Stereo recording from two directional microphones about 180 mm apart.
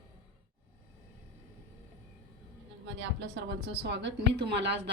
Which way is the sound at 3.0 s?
70° right (ahead or behind).